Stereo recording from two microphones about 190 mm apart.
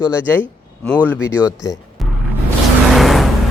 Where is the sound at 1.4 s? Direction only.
15° left (ahead or behind).